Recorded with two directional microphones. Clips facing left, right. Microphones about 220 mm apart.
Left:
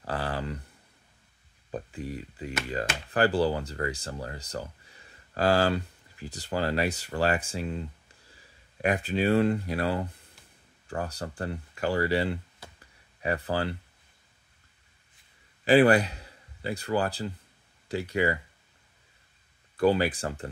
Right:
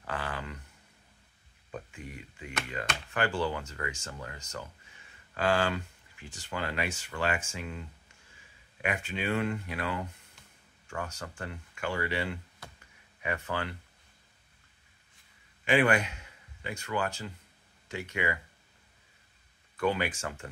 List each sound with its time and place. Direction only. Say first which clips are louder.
0.0 s a sound: left 5 dB; 35° left (ahead or behind)
1.7 s speech: left 7 dB; 35° left (ahead or behind)
15.6 s a man's voice: left 6 dB; 35° left (ahead or behind)
19.8 s speech: left 6 dB; 35° left (ahead or behind)